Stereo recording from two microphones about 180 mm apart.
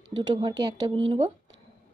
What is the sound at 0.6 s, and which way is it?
Speech, 25° right (ahead or behind).